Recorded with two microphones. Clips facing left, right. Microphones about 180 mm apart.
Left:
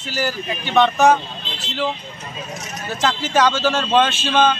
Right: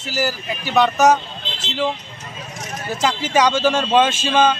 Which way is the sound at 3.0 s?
10° right (ahead or behind).